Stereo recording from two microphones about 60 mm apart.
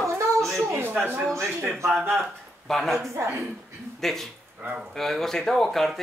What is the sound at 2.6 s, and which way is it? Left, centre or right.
Speech, centre.